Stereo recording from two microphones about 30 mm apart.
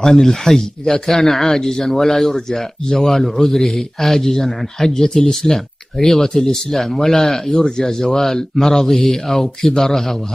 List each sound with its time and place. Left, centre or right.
0.0 s speech: centre